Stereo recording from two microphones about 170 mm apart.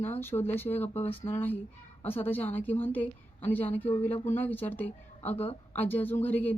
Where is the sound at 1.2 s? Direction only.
10° left (ahead or behind).